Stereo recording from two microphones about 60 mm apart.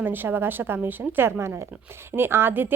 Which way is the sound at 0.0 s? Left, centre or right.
Right.